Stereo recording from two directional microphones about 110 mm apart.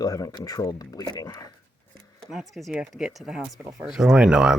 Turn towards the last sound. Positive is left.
turn(degrees=-5)  # may be behind; listen again after turning